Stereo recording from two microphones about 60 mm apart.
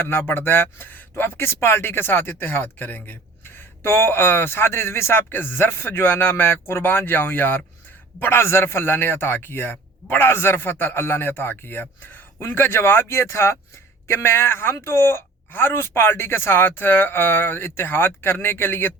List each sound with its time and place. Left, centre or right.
0.3 s a man's voice: left